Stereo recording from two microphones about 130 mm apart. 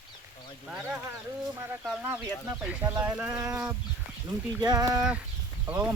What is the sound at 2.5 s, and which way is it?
Speech, 15° right (ahead or behind).